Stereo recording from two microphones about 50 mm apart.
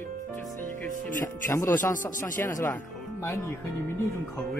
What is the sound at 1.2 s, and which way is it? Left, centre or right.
Speech, left.